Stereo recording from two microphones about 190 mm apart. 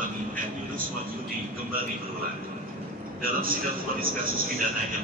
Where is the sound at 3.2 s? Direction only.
50° right (ahead or behind).